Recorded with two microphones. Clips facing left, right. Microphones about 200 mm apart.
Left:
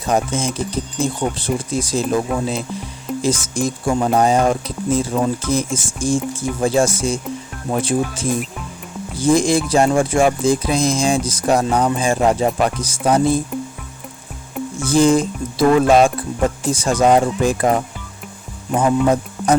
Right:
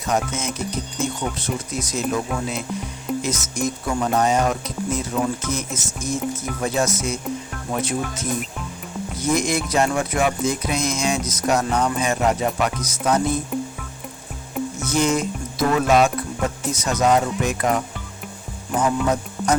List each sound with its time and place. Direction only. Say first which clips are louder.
0.1 s speech: left 5 dB; 30° left (ahead or behind)
14.8 s speech: left 8 dB; 30° left (ahead or behind)